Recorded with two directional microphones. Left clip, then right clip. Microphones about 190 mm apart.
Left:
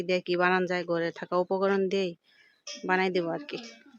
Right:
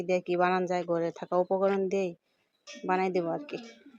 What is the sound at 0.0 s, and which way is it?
Speech, 5° left (ahead or behind).